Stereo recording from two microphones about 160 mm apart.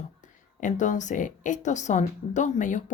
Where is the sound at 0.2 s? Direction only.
50° left (ahead or behind).